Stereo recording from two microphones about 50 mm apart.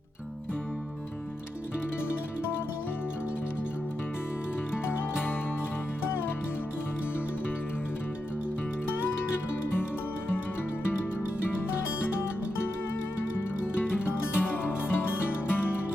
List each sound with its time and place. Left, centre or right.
4.9 s music: left
8.9 s music: left
13.7 s music: left